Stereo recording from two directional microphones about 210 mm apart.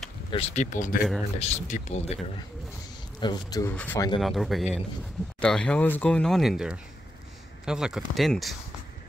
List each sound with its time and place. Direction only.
0.3 s speech: 30° left (ahead or behind)
3.2 s a man's voice: 20° left (ahead or behind); by 8.5 s centre (ahead or behind)